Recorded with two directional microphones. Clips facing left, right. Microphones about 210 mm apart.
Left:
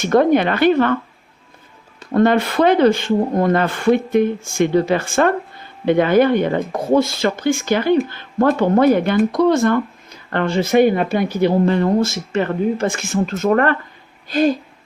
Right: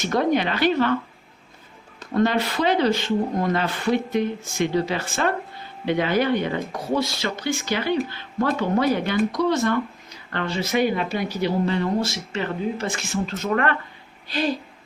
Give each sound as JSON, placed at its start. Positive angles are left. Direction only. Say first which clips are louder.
{"t": 0.0, "sound": "speech", "louder": "left 7 dB", "side_deg": 55}
{"t": 2.1, "sound": "speech", "louder": "left 6 dB", "side_deg": 50}